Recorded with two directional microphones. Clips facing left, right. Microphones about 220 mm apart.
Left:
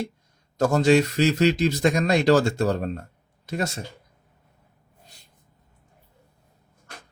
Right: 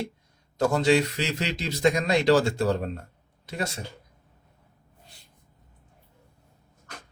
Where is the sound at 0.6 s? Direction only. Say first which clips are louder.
Left 3 dB; 45° left (ahead or behind).